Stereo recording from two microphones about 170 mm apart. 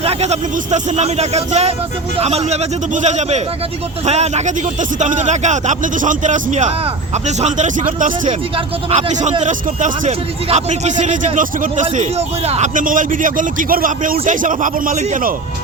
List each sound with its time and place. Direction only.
0.0 s speech: 35° right (ahead or behind)
11.9 s speech: 40° right (ahead or behind)